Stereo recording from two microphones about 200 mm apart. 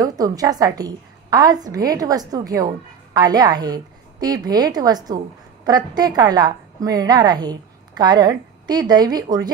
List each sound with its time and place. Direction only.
0.0 s a woman's voice: 20° right (ahead or behind)